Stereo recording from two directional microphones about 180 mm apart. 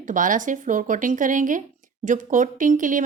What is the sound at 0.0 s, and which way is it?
Speech, 45° right (ahead or behind).